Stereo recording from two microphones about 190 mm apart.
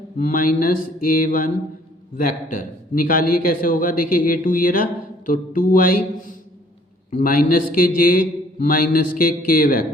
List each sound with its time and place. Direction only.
0.2 s a man's voice: 45° left (ahead or behind)